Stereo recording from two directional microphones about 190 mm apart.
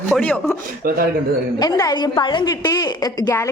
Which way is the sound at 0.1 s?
5° left (ahead or behind).